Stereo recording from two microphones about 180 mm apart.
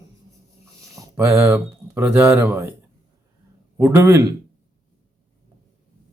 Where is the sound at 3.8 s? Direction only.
15° right (ahead or behind).